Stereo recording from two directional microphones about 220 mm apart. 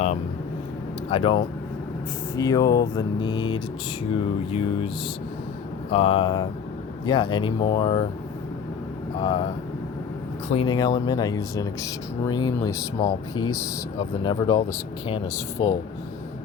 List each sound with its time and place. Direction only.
1.1 s speech: 25° left (ahead or behind)
5.9 s speech: 25° left (ahead or behind)
9.1 s speech: 25° left (ahead or behind)
10.5 s speech: 20° left (ahead or behind)
14.3 s speech: 20° left (ahead or behind)